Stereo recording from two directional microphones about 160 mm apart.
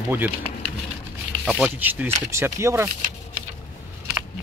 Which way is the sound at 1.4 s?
5° left (ahead or behind).